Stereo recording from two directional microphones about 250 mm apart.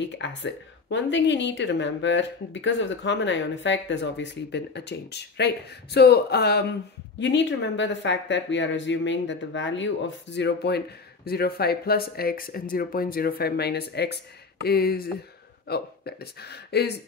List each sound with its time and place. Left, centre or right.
0.0 s speech: left